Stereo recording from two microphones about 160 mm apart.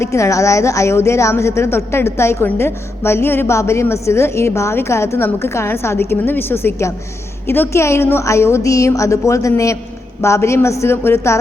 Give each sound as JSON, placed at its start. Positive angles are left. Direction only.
{"t": 0.0, "sound": "a woman's voice", "side_deg": 20}